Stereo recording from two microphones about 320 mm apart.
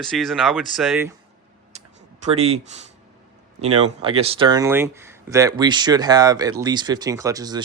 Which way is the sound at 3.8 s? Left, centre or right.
Centre.